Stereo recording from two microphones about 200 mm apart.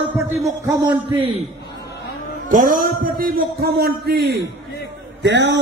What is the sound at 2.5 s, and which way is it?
A man's voice, 45° right (ahead or behind).